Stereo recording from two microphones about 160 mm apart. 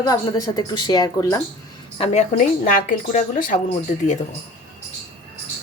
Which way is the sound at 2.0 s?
45° left (ahead or behind).